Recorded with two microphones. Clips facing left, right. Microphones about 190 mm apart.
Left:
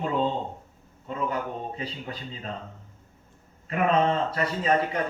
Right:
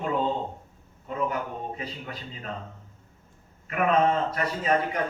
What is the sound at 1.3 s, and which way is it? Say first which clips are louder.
Speech: left 1 dB; 30° left (ahead or behind).